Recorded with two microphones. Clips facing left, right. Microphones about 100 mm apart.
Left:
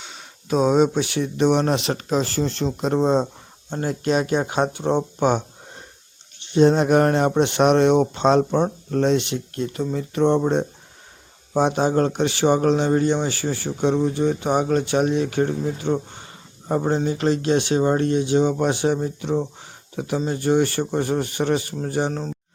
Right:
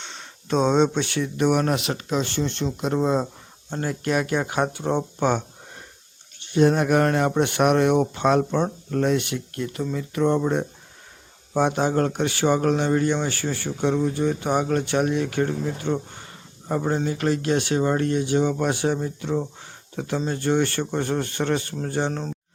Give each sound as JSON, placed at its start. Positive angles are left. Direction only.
{"t": 0.0, "sound": "speech", "side_deg": 5}
{"t": 3.7, "sound": "speech", "side_deg": 20}
{"t": 6.4, "sound": "speech", "side_deg": 20}
{"t": 9.9, "sound": "speech", "side_deg": 40}
{"t": 10.2, "sound": "speech", "side_deg": 25}